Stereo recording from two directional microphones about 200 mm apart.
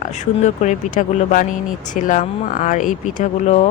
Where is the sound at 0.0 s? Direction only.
35° left (ahead or behind).